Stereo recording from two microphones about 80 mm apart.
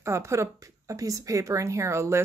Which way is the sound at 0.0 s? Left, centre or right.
Right.